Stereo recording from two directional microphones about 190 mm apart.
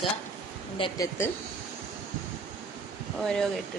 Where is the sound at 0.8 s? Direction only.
30° left (ahead or behind).